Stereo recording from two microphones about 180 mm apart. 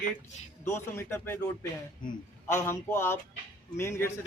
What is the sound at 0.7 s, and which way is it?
Speech, 15° left (ahead or behind).